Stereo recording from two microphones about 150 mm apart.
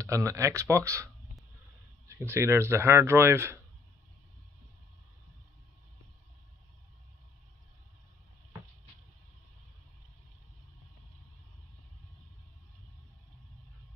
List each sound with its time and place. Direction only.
0.0 s speech: 20° right (ahead or behind)
2.0 s speech: 15° right (ahead or behind)